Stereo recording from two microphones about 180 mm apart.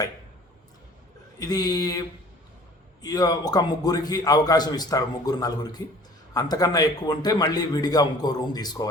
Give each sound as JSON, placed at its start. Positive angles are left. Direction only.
{"t": 1.4, "sound": "a man's voice", "side_deg": 20}